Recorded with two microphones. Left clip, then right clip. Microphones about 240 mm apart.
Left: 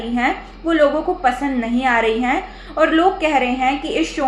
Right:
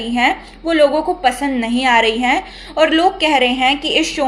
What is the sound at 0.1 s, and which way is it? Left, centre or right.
A woman's voice, right.